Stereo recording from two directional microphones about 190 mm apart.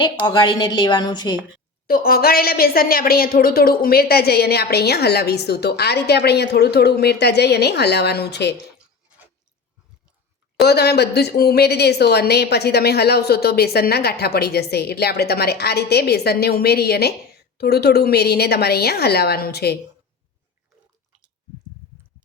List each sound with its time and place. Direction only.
0.0 s a woman's voice: 25° left (ahead or behind)
1.9 s speech: 50° left (ahead or behind)
10.7 s speech: 60° left (ahead or behind)